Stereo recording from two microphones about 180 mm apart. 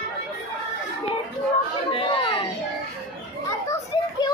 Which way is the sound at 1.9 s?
30° left (ahead or behind).